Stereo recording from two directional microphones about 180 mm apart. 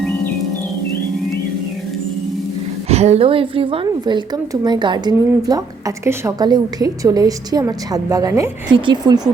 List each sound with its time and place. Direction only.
2.9 s a woman's voice: 35° right (ahead or behind)